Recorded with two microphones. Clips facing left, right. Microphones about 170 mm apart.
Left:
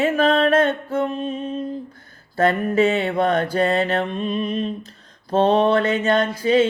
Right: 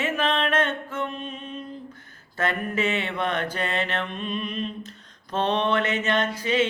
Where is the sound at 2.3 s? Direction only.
35° left (ahead or behind).